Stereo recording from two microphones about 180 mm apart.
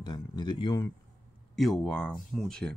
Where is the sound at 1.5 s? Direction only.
Centre (ahead or behind).